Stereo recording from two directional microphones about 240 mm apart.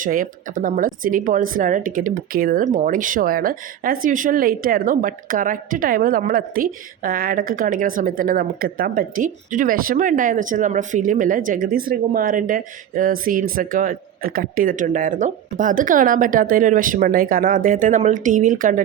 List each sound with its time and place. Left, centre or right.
0.0 s a woman's voice: right